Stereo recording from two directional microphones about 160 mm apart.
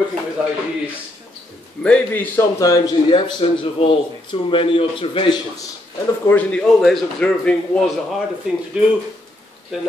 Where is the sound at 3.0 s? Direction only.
30° left (ahead or behind).